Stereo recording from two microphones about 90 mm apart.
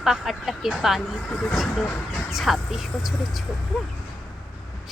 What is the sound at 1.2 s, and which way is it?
Speech, 15° left (ahead or behind).